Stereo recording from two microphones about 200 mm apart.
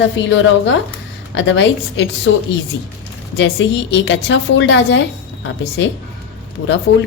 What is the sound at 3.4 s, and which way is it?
A woman's voice, 65° left (ahead or behind).